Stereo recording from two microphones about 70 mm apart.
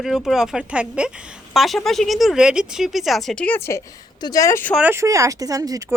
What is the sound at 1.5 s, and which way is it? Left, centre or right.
Speech, centre.